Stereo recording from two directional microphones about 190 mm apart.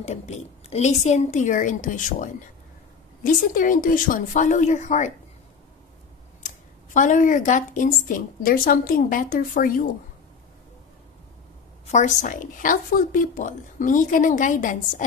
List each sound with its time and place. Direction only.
0.0 s a woman's voice: 35° left (ahead or behind)
3.5 s a woman's voice: 45° left (ahead or behind)
6.4 s speech: 40° left (ahead or behind)
11.9 s speech: 40° left (ahead or behind)